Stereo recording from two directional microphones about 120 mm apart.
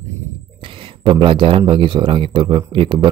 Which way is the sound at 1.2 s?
45° right (ahead or behind).